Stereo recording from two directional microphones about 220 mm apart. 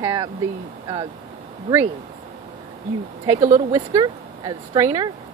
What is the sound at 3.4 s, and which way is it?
Speech, 30° right (ahead or behind).